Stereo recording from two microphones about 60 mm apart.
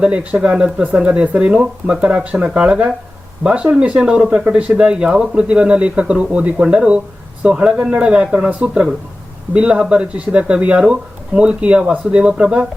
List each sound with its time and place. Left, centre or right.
0.0 s speech: centre